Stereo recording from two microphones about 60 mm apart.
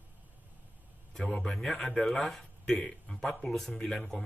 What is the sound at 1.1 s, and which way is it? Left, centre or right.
Speech, centre.